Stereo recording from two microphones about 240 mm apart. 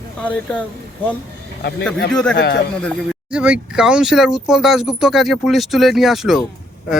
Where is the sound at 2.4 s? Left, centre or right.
Left.